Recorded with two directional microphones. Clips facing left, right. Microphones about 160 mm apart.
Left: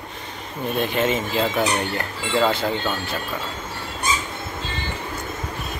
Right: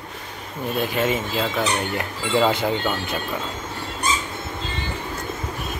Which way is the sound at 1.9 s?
15° right (ahead or behind).